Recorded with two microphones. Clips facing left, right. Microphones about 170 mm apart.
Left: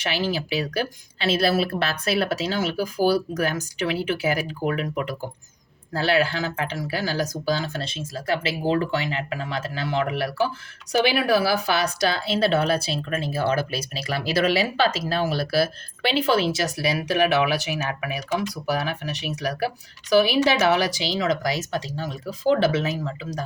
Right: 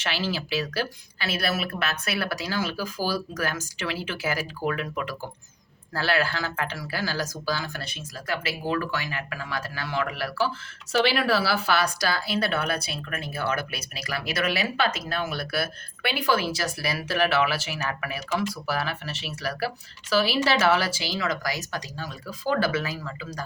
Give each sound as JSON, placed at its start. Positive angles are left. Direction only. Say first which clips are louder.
{"t": 0.0, "sound": "speech", "louder": "left 4 dB", "side_deg": 15}